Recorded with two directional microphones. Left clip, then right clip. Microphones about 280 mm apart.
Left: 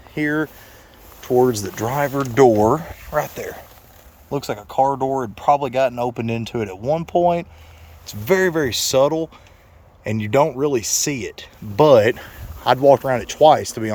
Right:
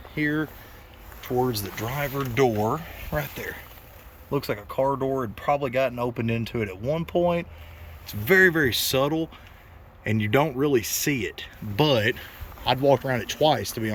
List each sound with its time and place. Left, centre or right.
0.1 s speech: centre
1.5 s speech: left
3.2 s speech: centre